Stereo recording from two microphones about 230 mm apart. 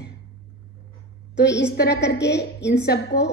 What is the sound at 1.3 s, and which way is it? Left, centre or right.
A woman's voice, left.